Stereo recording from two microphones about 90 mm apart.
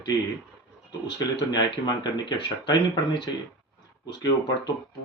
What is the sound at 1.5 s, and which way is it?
Speech, 50° left (ahead or behind).